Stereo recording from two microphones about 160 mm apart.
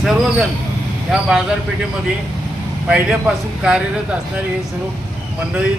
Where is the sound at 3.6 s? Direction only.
5° right (ahead or behind).